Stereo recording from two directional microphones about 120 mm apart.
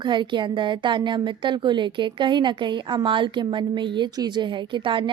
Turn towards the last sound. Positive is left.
turn(degrees=-40)  # may be behind; listen again after turning